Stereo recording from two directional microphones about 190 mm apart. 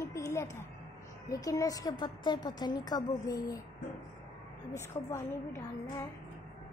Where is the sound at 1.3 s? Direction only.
20° left (ahead or behind).